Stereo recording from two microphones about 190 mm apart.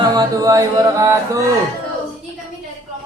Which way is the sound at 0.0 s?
20° right (ahead or behind).